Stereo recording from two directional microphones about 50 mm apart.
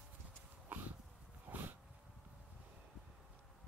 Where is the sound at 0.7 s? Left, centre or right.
Right.